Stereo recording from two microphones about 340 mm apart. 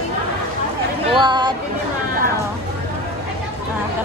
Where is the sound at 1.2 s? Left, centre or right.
Centre.